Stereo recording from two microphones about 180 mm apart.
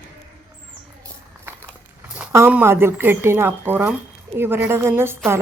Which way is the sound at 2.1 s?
10° right (ahead or behind).